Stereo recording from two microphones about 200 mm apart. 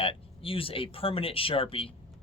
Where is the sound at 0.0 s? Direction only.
25° left (ahead or behind).